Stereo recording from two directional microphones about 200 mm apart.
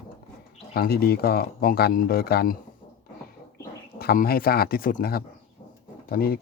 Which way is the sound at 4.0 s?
50° left (ahead or behind).